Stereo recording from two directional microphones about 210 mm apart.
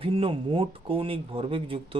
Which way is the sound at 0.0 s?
25° right (ahead or behind).